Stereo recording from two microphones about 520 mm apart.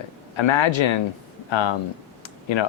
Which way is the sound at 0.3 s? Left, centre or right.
Left.